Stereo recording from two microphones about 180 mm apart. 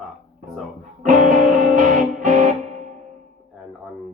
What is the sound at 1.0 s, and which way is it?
Music, 50° right (ahead or behind).